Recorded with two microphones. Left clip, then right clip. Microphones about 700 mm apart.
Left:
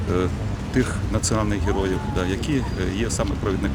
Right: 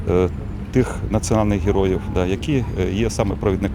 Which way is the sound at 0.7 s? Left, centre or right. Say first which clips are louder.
Right 4 dB; right.